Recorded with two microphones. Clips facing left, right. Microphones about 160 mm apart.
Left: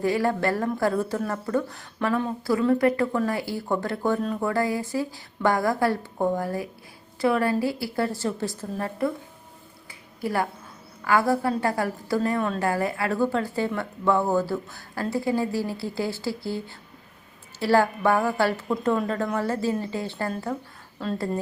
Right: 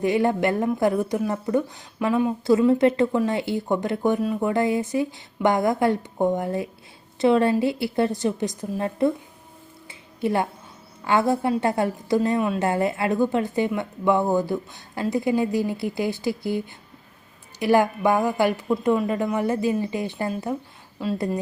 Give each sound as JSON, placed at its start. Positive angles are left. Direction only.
{"t": 0.0, "sound": "speech", "side_deg": -20}
{"t": 10.2, "sound": "a woman's voice", "side_deg": -20}